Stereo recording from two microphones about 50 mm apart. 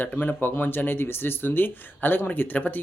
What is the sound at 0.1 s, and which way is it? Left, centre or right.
Speech, left.